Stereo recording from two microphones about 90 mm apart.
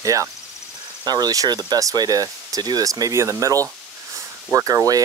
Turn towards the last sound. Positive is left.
turn(degrees=-40)  # may be behind; listen again after turning